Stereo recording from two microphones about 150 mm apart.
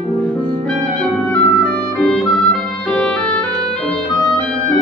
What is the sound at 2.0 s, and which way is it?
Music, 5° left (ahead or behind).